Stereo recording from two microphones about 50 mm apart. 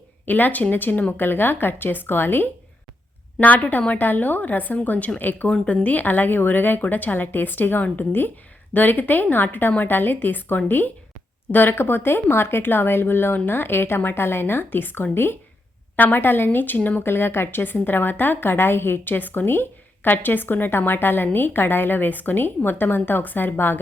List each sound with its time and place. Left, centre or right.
0.3 s a woman's voice: left
3.4 s a woman's voice: left
17.0 s speech: left